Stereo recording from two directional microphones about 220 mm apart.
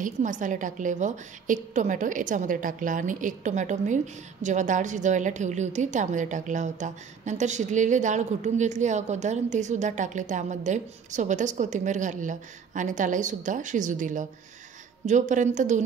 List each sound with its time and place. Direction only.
0.0 s a woman's voice: 35° right (ahead or behind)